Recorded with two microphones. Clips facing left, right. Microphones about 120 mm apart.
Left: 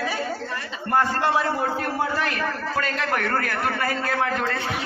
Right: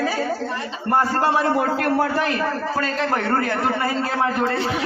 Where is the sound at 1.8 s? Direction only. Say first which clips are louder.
Right 5 dB; 65° right (ahead or behind).